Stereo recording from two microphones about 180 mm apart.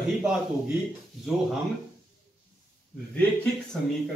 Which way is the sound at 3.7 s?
5° left (ahead or behind).